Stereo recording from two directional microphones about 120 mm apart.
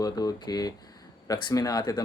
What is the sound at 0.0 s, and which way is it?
Speech, 35° left (ahead or behind).